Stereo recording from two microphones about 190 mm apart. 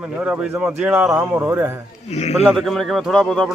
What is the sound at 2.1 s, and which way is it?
Speech, 35° left (ahead or behind).